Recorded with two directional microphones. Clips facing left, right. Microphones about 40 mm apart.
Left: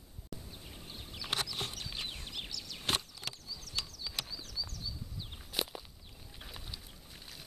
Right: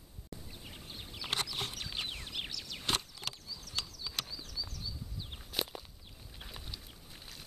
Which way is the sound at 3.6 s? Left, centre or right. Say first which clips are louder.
Even; centre.